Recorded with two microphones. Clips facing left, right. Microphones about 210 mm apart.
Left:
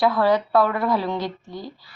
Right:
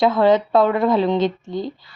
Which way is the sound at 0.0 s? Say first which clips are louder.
Right 4 dB; 25° right (ahead or behind).